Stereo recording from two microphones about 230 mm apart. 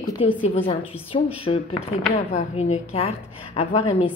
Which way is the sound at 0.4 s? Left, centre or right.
Left.